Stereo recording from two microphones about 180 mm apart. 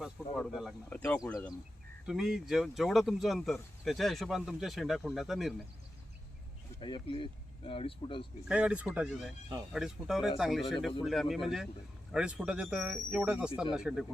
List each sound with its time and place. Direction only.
0.0 s speech: centre (ahead or behind)
0.9 s speech: 10° left (ahead or behind)
2.0 s speech: centre (ahead or behind)
6.7 s speech: 30° left (ahead or behind)
8.4 s speech: 5° right (ahead or behind)